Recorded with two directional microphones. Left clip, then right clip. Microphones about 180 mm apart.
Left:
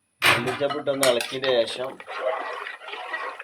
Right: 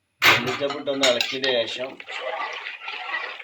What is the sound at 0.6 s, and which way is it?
Cutlery, 30° left (ahead or behind).